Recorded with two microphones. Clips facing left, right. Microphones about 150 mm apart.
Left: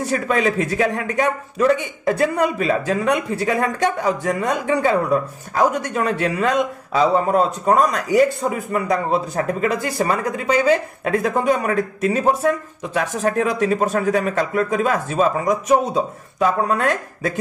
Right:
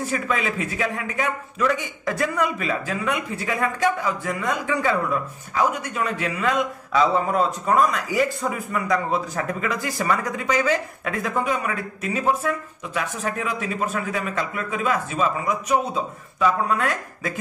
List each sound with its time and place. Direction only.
0.1 s speech: 40° left (ahead or behind)